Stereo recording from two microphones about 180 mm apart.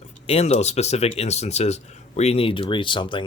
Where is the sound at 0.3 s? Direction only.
35° left (ahead or behind).